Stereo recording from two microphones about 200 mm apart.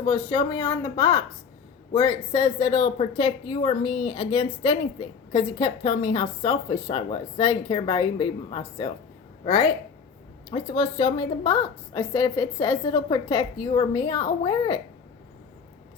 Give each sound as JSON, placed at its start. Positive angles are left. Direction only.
{"t": 0.0, "sound": "a woman's voice", "side_deg": 20}
{"t": 10.5, "sound": "a woman's voice", "side_deg": 25}